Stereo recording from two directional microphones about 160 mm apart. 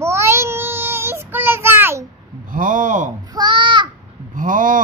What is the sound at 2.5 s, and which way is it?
Speech, 55° right (ahead or behind).